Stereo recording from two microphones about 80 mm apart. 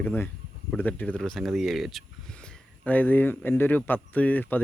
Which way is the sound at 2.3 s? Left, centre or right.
Centre.